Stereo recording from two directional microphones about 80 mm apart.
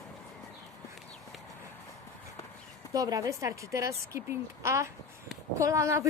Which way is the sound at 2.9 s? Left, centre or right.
Right.